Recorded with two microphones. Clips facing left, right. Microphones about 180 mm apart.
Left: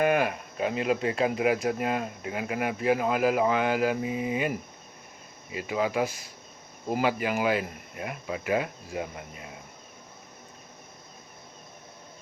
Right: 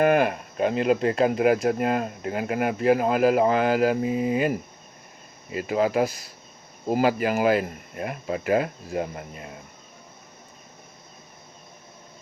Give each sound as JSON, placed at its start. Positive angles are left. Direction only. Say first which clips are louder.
{"t": 0.0, "sound": "cricket", "louder": "right 4 dB", "side_deg": -40}
{"t": 0.8, "sound": "speech", "louder": "right 5 dB", "side_deg": -45}